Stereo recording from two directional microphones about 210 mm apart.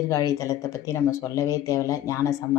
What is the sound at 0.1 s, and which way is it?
Speech, 15° left (ahead or behind).